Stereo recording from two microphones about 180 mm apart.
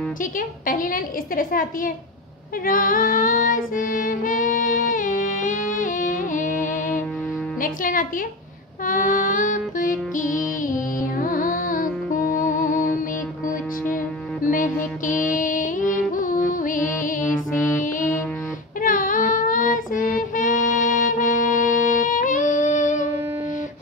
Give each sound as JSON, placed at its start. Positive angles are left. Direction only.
{"t": 0.2, "sound": "a woman's voice", "side_deg": 50}
{"t": 2.6, "sound": "music", "side_deg": 50}
{"t": 7.6, "sound": "a woman's voice", "side_deg": 50}
{"t": 8.8, "sound": "music", "side_deg": 50}
{"t": 13.9, "sound": "music", "side_deg": 50}
{"t": 17.3, "sound": "music", "side_deg": 15}
{"t": 17.7, "sound": "music", "side_deg": 45}
{"t": 18.8, "sound": "child singing", "side_deg": 50}